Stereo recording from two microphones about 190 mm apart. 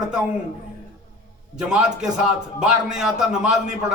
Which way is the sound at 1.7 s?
5° right (ahead or behind).